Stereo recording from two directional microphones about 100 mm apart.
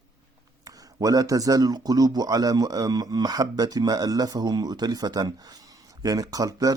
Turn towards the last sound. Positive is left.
turn(degrees=-35)  # may be behind; listen again after turning